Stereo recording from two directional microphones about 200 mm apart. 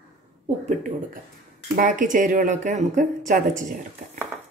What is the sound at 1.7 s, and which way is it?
Speech, 40° right (ahead or behind).